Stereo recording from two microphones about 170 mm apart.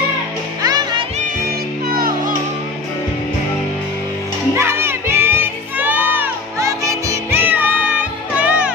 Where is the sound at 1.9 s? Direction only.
60° right (ahead or behind).